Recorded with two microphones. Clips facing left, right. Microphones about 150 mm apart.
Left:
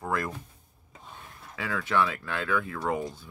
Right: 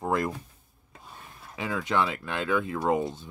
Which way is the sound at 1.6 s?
20° right (ahead or behind).